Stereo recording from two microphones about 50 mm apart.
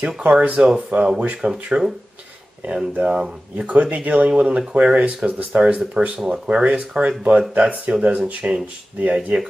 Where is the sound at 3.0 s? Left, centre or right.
Centre.